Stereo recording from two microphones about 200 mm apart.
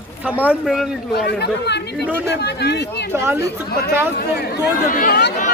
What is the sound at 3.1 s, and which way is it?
Speech, 15° right (ahead or behind).